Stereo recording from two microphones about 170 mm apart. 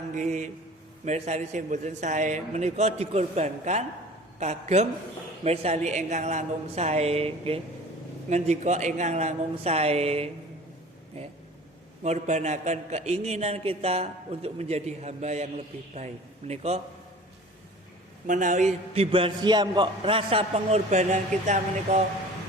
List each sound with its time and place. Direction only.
0.1 s a man's voice: 45° right (ahead or behind)
12.0 s a man's voice: 45° right (ahead or behind)
18.3 s a man's voice: 50° right (ahead or behind)